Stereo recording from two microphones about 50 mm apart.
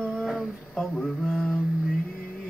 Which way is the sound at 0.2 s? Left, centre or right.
Centre.